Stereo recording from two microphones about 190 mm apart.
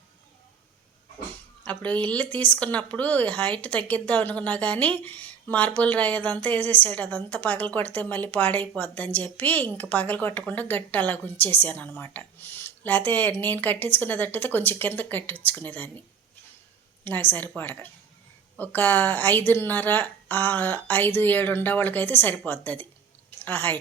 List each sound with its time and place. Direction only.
1.6 s speech: 5° left (ahead or behind)